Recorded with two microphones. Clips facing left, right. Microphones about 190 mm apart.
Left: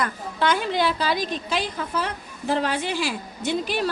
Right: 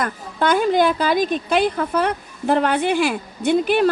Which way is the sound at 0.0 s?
50° right (ahead or behind).